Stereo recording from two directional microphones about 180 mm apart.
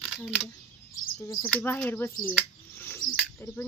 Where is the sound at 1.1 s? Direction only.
15° left (ahead or behind).